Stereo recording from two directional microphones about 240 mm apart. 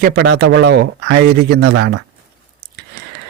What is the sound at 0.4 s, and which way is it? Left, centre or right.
Speech, right.